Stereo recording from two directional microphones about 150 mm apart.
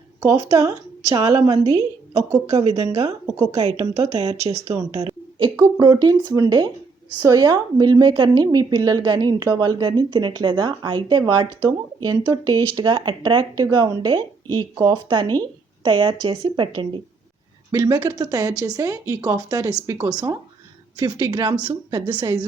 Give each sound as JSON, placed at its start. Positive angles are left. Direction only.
{"t": 0.2, "sound": "a woman's voice", "side_deg": -20}
{"t": 1.5, "sound": "speech", "side_deg": -45}
{"t": 2.9, "sound": "a woman's voice", "side_deg": -20}
{"t": 3.5, "sound": "speech", "side_deg": -45}
{"t": 5.5, "sound": "a woman's voice", "side_deg": -25}